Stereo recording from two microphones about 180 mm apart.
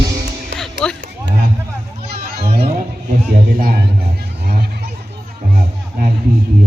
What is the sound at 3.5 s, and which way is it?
Speech, 55° right (ahead or behind).